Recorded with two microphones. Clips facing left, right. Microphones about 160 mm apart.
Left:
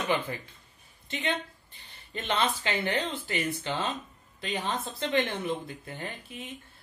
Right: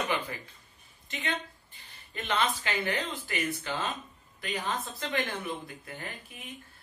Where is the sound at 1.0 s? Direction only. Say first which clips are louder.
Left 4 dB; 25° left (ahead or behind).